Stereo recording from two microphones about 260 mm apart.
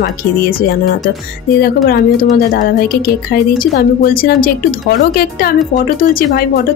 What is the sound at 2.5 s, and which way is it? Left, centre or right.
Speech, left.